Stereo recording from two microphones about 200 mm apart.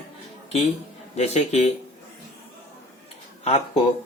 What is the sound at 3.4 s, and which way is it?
Speech, 30° left (ahead or behind).